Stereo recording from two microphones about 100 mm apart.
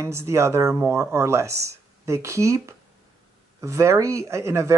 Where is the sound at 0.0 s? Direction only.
30° right (ahead or behind).